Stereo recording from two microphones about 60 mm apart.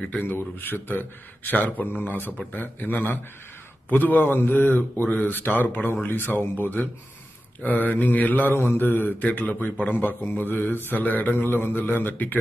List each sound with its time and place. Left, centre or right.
0.1 s mantra: left